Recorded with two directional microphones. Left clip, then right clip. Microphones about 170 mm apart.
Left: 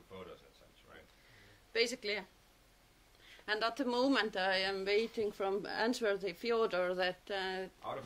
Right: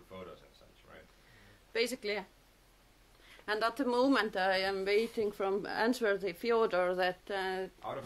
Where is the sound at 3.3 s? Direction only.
20° right (ahead or behind).